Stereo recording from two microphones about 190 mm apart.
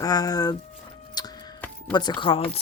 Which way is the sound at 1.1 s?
20° left (ahead or behind).